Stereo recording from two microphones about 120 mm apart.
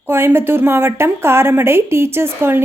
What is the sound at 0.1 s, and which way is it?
A woman's voice, 20° right (ahead or behind).